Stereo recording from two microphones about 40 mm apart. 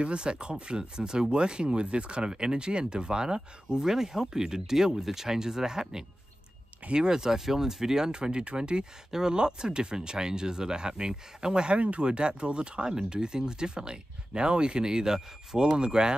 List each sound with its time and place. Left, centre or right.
0.0 s speech: right